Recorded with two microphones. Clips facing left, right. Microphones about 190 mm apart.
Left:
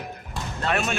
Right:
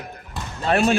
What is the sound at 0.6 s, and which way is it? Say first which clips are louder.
Speech: right 7 dB; 35° right (ahead or behind).